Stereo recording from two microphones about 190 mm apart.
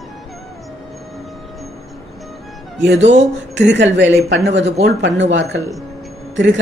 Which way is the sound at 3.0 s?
35° right (ahead or behind).